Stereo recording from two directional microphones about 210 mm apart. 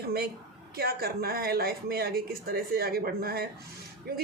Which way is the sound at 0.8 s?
45° right (ahead or behind).